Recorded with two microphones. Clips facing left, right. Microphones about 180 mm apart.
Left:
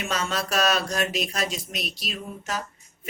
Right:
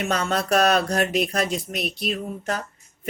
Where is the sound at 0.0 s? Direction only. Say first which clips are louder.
Right 4 dB; 60° right (ahead or behind).